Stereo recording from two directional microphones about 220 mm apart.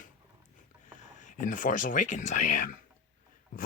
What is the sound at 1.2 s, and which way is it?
Speech, 35° left (ahead or behind).